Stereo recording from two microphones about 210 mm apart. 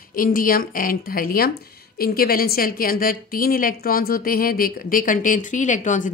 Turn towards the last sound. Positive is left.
turn(degrees=35)  # may be behind; listen again after turning